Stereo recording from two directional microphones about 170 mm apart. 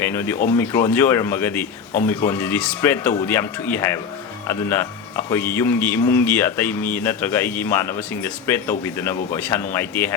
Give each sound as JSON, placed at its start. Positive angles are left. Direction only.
{"t": 0.0, "sound": "speech", "side_deg": 15}